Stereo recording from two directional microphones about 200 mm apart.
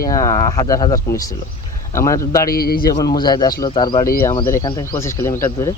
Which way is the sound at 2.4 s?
50° left (ahead or behind).